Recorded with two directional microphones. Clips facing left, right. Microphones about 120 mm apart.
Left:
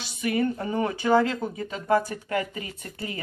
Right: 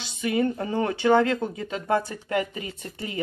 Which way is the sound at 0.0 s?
25° right (ahead or behind).